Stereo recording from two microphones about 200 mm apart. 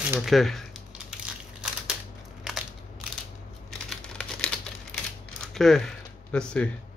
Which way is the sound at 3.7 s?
5° left (ahead or behind).